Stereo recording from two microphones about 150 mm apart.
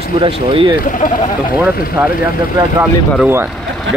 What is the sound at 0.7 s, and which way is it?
Speech, 65° left (ahead or behind).